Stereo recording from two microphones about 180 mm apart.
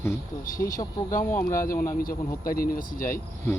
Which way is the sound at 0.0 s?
15° left (ahead or behind).